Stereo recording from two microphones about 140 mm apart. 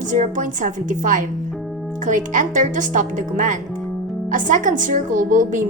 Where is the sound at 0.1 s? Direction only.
65° right (ahead or behind).